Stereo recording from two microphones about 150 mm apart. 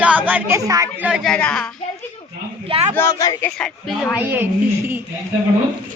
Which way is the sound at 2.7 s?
45° right (ahead or behind).